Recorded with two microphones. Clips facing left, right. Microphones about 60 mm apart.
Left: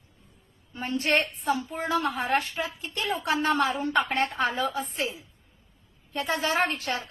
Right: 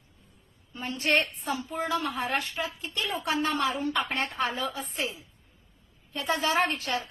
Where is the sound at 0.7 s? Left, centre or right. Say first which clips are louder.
Left 1 dB; left.